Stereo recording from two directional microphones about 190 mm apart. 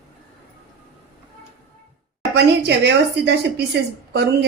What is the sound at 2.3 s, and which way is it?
Speech, 60° right (ahead or behind).